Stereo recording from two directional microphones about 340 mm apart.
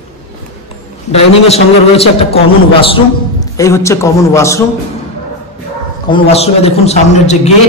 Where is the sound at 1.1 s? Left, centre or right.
Centre.